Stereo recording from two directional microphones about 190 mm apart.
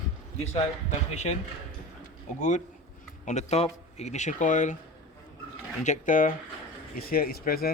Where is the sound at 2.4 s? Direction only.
40° left (ahead or behind).